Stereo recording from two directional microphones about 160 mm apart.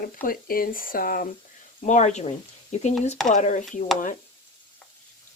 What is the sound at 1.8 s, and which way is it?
Speech, 45° left (ahead or behind).